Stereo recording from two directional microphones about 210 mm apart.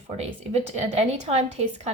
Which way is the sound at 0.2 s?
30° right (ahead or behind).